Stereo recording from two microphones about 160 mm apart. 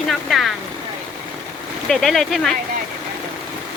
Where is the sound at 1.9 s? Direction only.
Centre (ahead or behind).